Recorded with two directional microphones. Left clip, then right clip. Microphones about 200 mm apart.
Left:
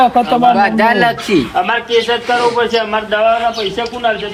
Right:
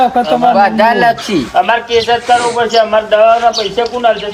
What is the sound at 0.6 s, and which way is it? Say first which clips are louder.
Speech: right 2 dB; 20° right (ahead or behind).